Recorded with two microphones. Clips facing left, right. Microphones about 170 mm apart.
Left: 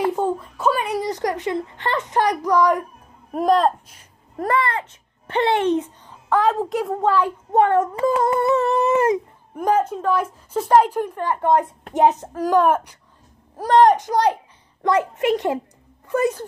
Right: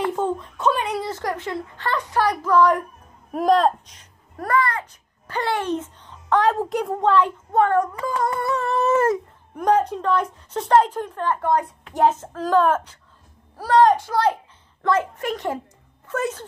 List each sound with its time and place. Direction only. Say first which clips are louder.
0.0 s a woman's voice: left 2 dB; 10° left (ahead or behind)
3.3 s speech: even; centre (ahead or behind)
4.4 s a child's voice: left 1 dB; 25° left (ahead or behind)
6.0 s a child's voice: right 1 dB; 5° left (ahead or behind)
7.5 s a child's voice: left 2 dB; 20° left (ahead or behind)
9.6 s a woman's voice: even; 5° left (ahead or behind)